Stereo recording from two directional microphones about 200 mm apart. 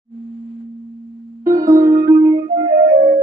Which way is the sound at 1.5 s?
15° right (ahead or behind).